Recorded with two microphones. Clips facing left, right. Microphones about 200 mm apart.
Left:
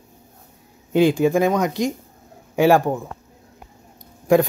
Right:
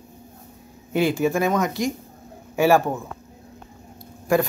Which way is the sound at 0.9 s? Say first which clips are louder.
Left 4 dB; 15° left (ahead or behind).